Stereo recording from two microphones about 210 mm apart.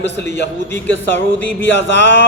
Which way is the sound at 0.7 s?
10° left (ahead or behind).